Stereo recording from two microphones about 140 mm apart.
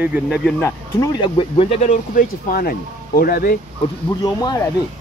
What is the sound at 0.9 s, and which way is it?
Speech, 30° left (ahead or behind).